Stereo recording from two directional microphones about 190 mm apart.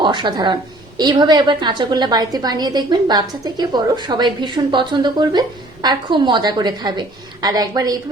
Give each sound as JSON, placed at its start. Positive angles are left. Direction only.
{"t": 0.0, "sound": "a woman's voice", "side_deg": -25}